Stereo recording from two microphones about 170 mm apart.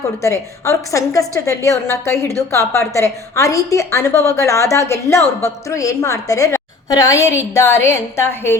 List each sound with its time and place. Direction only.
0.2 s a woman's voice: 15° left (ahead or behind)